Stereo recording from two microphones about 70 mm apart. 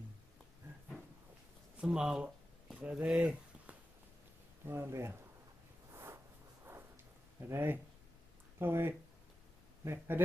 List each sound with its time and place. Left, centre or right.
1.8 s speech: centre
4.6 s speech: right
5.9 s zipper: right
7.3 s speech: right